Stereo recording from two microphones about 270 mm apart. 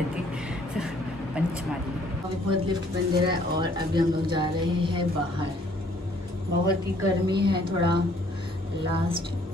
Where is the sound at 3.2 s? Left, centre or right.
Centre.